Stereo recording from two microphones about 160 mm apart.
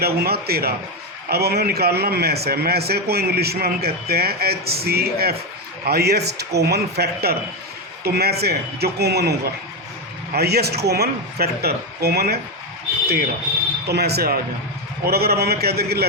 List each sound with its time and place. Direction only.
0.0 s a man's voice: 80° right
5.8 s a man's voice: 90° right
10.3 s a man's voice: 85° right
13.8 s a man's voice: 90° right